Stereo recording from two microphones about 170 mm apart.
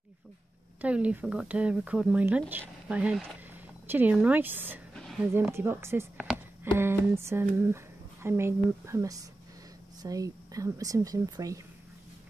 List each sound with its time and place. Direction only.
0.7 s speech: 10° right (ahead or behind)